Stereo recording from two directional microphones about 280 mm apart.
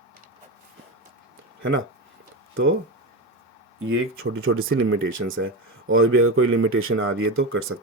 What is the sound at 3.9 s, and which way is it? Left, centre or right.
Speech, right.